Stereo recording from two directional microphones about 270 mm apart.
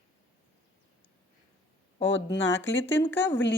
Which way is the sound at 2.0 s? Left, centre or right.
Left.